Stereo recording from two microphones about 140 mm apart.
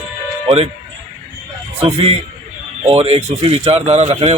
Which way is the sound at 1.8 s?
45° right (ahead or behind).